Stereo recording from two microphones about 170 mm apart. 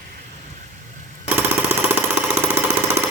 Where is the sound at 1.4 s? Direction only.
15° right (ahead or behind).